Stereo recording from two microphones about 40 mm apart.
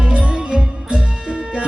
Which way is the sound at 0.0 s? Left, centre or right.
Right.